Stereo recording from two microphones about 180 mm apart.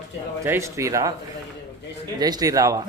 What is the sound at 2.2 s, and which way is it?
Speech, 20° right (ahead or behind).